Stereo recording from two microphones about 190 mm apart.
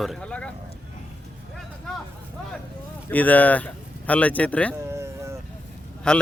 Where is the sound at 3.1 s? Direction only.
10° left (ahead or behind).